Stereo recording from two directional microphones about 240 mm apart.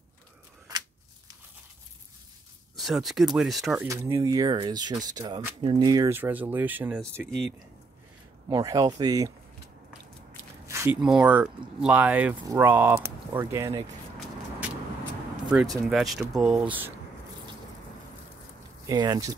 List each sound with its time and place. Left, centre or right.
2.7 s speech: centre
3.8 s speech: centre
8.5 s speech: centre
10.7 s speech: centre
15.8 s speech: centre
18.9 s speech: centre